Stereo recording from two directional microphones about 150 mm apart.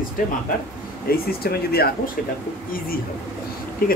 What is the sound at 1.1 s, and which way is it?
Speech, 90° left.